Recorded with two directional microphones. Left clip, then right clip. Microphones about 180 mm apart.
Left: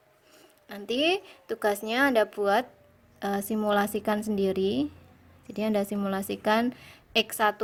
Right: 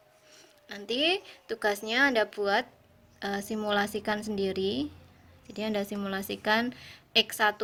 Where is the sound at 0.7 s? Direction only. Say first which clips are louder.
Left 2 dB; 30° left (ahead or behind).